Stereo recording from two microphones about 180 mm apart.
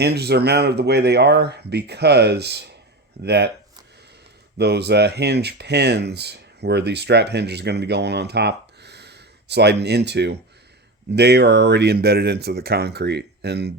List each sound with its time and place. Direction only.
0.0 s speech: 65° right (ahead or behind)
4.5 s speech: 65° right (ahead or behind)